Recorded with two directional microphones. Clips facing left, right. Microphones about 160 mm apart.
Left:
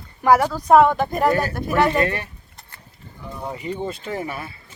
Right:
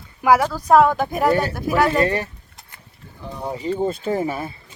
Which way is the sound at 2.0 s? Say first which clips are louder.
Right 3 dB; 35° right (ahead or behind).